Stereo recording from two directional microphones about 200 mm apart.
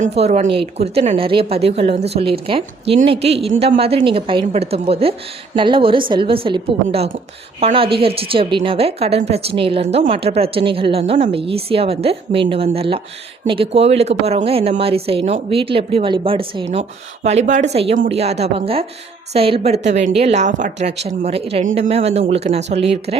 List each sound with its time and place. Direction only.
0.0 s a woman's voice: 35° right (ahead or behind)